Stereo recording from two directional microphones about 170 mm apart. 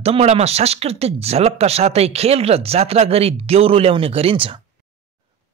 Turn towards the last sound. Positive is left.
turn(degrees=-35)  # may be behind; listen again after turning